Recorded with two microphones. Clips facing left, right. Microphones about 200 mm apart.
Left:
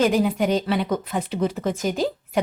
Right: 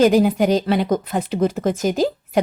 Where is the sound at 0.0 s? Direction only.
40° right (ahead or behind).